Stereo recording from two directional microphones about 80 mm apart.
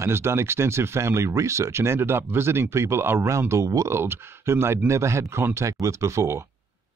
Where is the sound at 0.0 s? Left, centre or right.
Right.